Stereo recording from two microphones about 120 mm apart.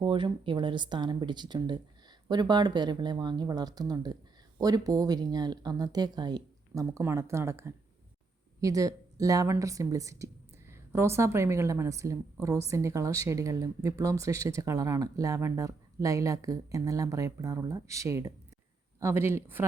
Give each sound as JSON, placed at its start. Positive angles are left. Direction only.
{"t": 0.0, "sound": "speech", "side_deg": -40}
{"t": 6.8, "sound": "a woman's voice", "side_deg": -25}